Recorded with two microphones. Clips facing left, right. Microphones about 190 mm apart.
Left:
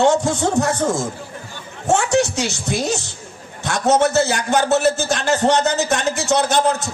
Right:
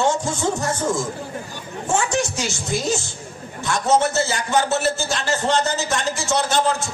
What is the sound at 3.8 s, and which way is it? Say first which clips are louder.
Speech: left 4 dB; 65° left (ahead or behind).